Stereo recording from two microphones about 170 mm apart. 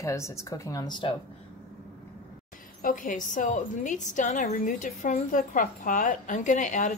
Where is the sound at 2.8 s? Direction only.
50° left (ahead or behind).